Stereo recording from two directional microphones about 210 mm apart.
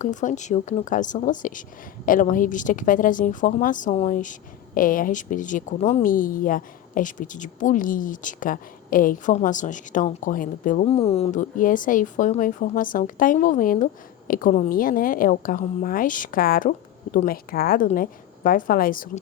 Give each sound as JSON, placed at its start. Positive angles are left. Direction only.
{"t": 0.0, "sound": "a woman's voice", "side_deg": 35}
{"t": 10.8, "sound": "a woman's voice", "side_deg": 30}